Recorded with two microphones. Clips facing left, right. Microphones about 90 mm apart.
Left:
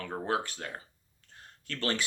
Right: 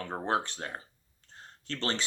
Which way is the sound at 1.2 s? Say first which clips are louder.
Right 3 dB; 30° right (ahead or behind).